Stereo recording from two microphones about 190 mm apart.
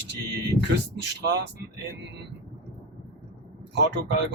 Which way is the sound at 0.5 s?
60° right (ahead or behind).